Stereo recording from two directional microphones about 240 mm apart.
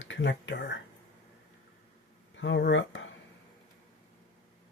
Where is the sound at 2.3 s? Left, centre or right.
Left.